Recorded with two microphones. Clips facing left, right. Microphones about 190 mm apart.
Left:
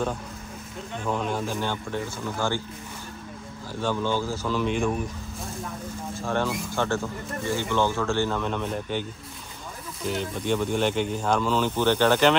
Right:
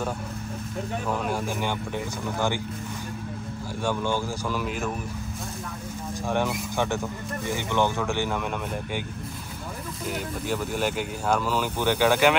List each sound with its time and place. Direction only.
1.0 s speech: 5° right (ahead or behind)
3.8 s speech: 15° right (ahead or behind)
6.1 s speech: 15° right (ahead or behind)
10.0 s speech: 5° right (ahead or behind)